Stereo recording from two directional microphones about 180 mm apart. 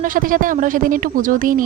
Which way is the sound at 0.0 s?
50° right (ahead or behind).